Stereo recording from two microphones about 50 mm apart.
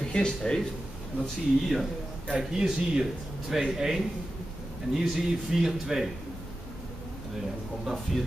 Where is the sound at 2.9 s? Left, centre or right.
Centre.